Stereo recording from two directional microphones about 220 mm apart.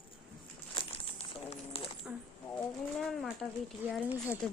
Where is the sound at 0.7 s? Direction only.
25° left (ahead or behind).